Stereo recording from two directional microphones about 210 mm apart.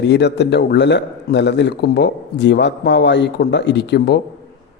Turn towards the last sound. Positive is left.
turn(degrees=50)  # may be behind; listen again after turning